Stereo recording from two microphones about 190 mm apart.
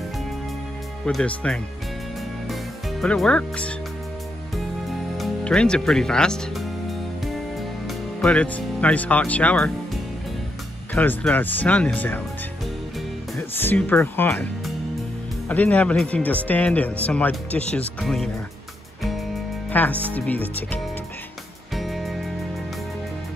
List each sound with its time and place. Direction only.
1.0 s speech: 5° left (ahead or behind)
2.4 s music: centre (ahead or behind)
4.8 s music: centre (ahead or behind)
8.2 s speech: 5° left (ahead or behind)
11.0 s speech: 10° left (ahead or behind)
13.4 s speech: 10° left (ahead or behind)
19.7 s speech: 10° left (ahead or behind)
21.7 s music: centre (ahead or behind)